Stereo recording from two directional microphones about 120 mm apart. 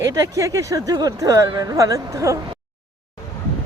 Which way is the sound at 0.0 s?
30° right (ahead or behind).